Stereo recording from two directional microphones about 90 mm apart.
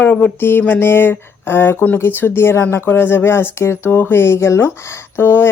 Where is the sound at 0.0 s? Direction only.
20° left (ahead or behind).